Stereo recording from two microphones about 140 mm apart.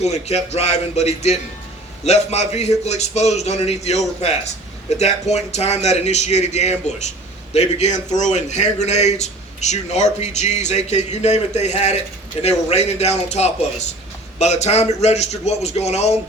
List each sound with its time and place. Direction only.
0.0 s a man's voice: 50° left (ahead or behind)